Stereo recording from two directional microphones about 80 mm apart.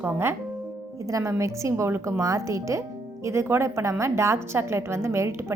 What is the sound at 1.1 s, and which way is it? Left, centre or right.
A woman's voice, right.